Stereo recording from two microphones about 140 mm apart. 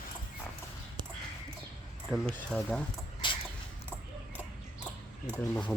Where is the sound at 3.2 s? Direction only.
35° left (ahead or behind).